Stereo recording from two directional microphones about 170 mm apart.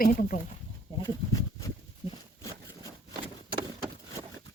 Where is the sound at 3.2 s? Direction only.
30° right (ahead or behind).